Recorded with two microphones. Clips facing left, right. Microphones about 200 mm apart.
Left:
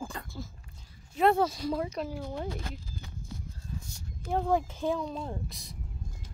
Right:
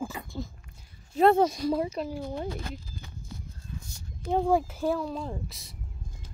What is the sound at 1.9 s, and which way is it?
Speech, centre (ahead or behind).